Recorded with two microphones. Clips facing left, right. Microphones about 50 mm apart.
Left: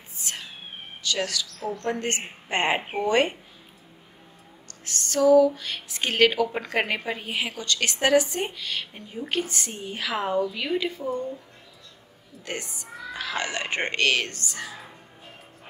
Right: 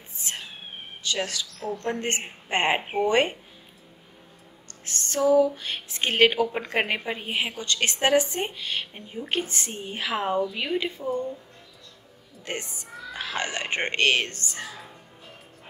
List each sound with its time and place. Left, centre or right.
0.2 s music: right
1.0 s a woman's voice: right
4.8 s a woman's voice: right
12.4 s speech: right